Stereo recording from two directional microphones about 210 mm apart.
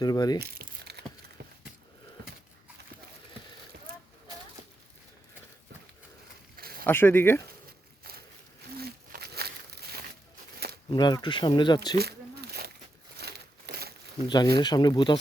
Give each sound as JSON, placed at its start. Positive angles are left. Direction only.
{"t": 0.0, "sound": "speech", "side_deg": 20}
{"t": 0.3, "sound": "crumpling", "side_deg": -50}
{"t": 6.6, "sound": "a sound", "side_deg": -45}
{"t": 6.8, "sound": "speech", "side_deg": 10}
{"t": 8.8, "sound": "a sound", "side_deg": -50}
{"t": 10.9, "sound": "speech", "side_deg": 20}
{"t": 11.9, "sound": "a sound", "side_deg": -50}
{"t": 13.1, "sound": "crumpling", "side_deg": -50}
{"t": 14.3, "sound": "speech", "side_deg": 20}